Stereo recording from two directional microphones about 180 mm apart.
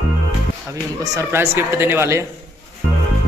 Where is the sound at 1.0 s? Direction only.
15° right (ahead or behind).